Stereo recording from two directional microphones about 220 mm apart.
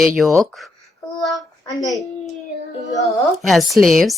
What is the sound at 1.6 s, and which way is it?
Speech, 15° left (ahead or behind).